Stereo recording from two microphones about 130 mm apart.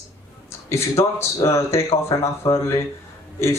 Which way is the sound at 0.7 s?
20° left (ahead or behind).